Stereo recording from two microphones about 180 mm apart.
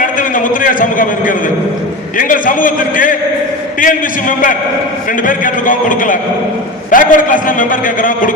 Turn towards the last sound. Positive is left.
turn(degrees=50)  # may be behind; listen again after turning